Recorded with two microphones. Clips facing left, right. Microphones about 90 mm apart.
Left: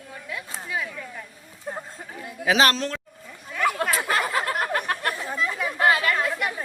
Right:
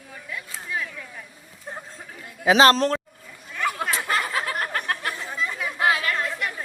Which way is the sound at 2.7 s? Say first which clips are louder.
Right 7 dB; 40° right (ahead or behind).